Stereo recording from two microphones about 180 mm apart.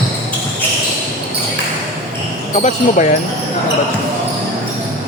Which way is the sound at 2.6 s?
40° left (ahead or behind).